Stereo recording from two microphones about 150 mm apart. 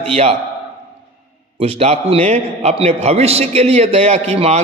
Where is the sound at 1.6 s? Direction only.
45° right (ahead or behind).